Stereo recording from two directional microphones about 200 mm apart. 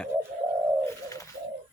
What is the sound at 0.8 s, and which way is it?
Bird, 15° left (ahead or behind).